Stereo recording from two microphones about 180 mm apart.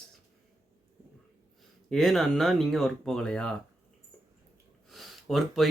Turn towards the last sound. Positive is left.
turn(degrees=0)  # may be behind; listen again after turning